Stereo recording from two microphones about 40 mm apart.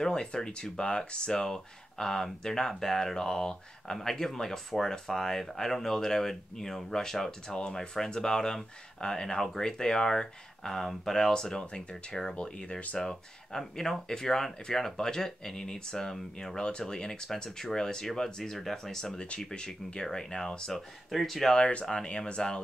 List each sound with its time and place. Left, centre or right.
0.0 s speech: centre
12.4 s speech: left; by 19.1 s centre
19.1 s speech: left
21.1 s speech: centre
21.5 s speech: left